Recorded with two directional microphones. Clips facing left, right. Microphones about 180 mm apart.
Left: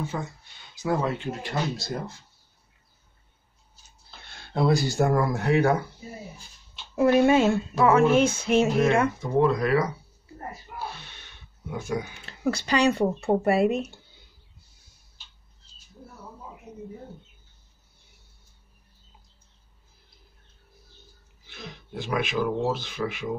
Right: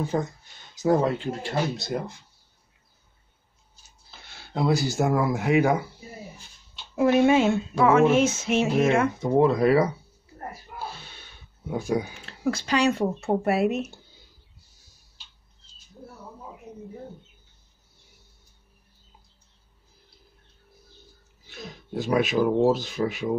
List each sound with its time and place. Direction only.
0.0 s speech: 40° right (ahead or behind)
1.9 s speech: 15° right (ahead or behind)
4.4 s speech: 5° right (ahead or behind)
7.0 s a sound: centre (ahead or behind)
9.2 s speech: 25° right (ahead or behind)
11.7 s speech: 35° right (ahead or behind)
12.1 s a sound: centre (ahead or behind)
16.7 s a sound: 10° right (ahead or behind)
21.5 s speech: 45° right (ahead or behind)